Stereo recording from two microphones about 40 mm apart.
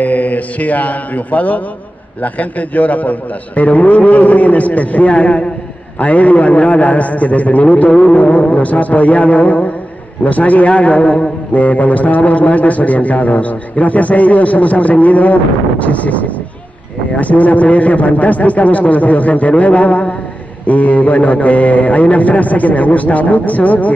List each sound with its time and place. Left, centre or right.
0.0 s a man's voice: left